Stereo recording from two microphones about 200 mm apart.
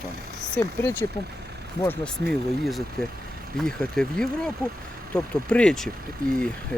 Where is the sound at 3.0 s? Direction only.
Centre (ahead or behind).